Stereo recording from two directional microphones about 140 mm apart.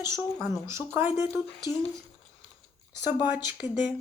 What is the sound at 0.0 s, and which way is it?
Speech, 20° right (ahead or behind).